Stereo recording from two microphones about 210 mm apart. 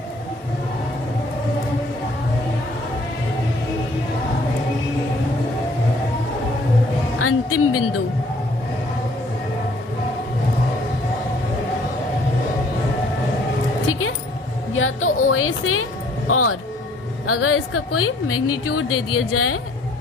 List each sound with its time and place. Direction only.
7.2 s music: 90° left
14.7 s music: 75° left (ahead or behind); by 16.6 s 90° left
17.2 s a woman's voice: 90° left